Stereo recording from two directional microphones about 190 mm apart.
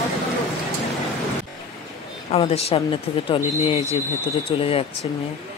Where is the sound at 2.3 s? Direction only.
30° left (ahead or behind).